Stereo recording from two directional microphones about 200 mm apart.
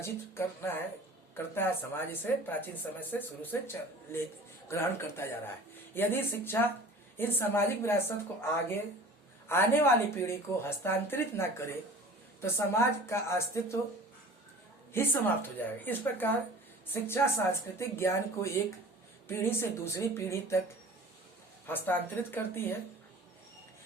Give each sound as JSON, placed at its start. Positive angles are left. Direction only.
{"t": 0.0, "sound": "speech", "side_deg": 10}
{"t": 4.7, "sound": "speech", "side_deg": 15}
{"t": 14.9, "sound": "speech", "side_deg": 10}
{"t": 21.7, "sound": "speech", "side_deg": 10}